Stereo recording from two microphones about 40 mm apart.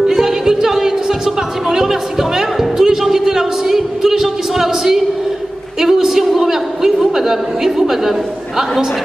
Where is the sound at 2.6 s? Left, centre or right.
Centre.